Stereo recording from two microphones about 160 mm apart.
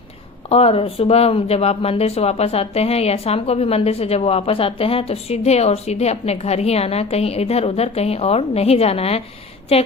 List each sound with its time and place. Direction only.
0.5 s speech: 40° left (ahead or behind)